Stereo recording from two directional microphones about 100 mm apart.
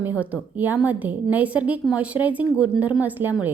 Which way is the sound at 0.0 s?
15° right (ahead or behind).